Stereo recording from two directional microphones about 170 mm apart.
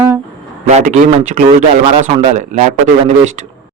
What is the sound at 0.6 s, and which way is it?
Speech, 45° right (ahead or behind).